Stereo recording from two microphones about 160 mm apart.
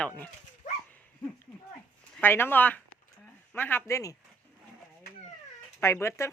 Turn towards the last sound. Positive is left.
turn(degrees=15)  # may be behind; listen again after turning